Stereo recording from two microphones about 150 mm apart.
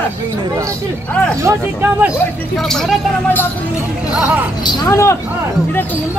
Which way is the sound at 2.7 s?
Centre (ahead or behind).